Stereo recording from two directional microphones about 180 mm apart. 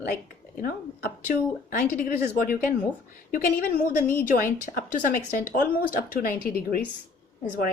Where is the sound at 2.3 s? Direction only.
50° left (ahead or behind).